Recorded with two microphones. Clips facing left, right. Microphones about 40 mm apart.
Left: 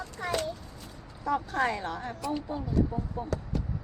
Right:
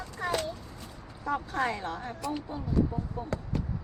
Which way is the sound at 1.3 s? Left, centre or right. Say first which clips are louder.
Left 2 dB; centre.